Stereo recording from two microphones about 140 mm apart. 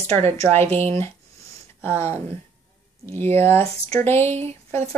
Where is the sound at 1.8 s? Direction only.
15° left (ahead or behind).